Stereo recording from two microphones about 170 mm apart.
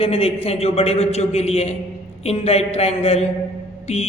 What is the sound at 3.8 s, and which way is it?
Music, 40° left (ahead or behind).